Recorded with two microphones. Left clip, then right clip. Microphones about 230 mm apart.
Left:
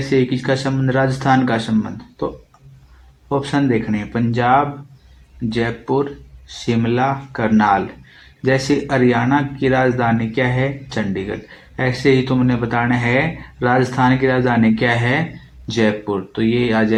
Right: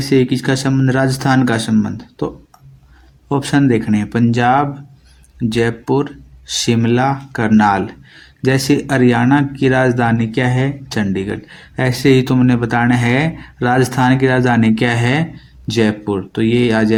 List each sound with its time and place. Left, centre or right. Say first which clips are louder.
0.1 s speech: right 2 dB; right